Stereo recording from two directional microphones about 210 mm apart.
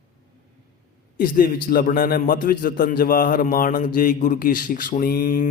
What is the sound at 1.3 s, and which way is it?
A man's voice, 45° left (ahead or behind).